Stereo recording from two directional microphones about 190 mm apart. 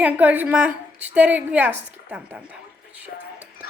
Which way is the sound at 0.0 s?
10° right (ahead or behind).